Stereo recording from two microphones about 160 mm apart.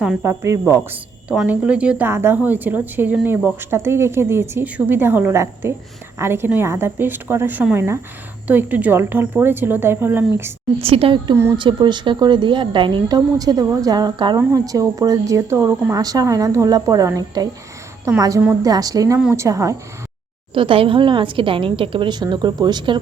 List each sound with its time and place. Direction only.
0.2 s speech: 15° right (ahead or behind)
10.8 s a woman's voice: 35° right (ahead or behind); by 19.7 s 20° right (ahead or behind)
20.5 s a woman's voice: 35° right (ahead or behind)